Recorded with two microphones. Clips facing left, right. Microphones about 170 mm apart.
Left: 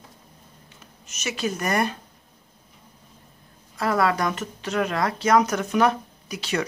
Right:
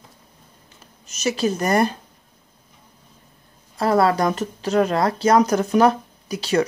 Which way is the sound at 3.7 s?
35° right (ahead or behind).